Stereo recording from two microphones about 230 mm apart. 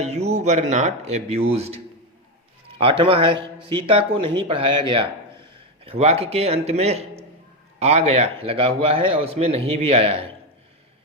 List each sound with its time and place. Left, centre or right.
0.0 s a man's voice: right